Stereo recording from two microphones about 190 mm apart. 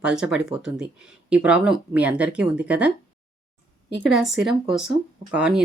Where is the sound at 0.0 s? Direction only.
5° right (ahead or behind).